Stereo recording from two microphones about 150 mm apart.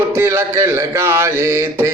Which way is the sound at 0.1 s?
15° right (ahead or behind).